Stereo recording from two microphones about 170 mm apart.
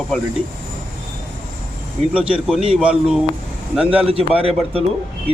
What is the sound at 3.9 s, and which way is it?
Speech, 35° right (ahead or behind).